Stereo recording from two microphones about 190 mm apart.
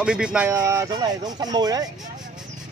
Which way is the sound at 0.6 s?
15° right (ahead or behind).